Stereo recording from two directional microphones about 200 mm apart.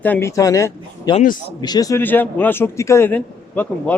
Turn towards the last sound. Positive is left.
turn(degrees=10)  # may be behind; listen again after turning